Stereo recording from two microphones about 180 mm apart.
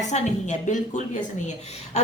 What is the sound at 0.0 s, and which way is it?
A woman's voice, 40° left (ahead or behind).